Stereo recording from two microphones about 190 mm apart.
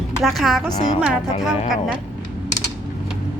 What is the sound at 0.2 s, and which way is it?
Speech, centre (ahead or behind).